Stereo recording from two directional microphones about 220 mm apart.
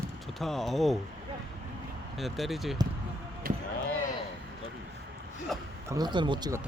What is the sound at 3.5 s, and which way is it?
Basketball bounce, 40° right (ahead or behind).